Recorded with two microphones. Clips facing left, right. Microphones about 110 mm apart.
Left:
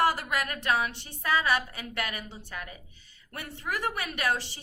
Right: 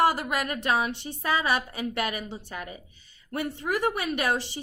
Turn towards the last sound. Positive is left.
turn(degrees=-20)  # may be behind; listen again after turning